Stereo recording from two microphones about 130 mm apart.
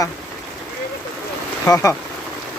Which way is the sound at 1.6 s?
20° left (ahead or behind).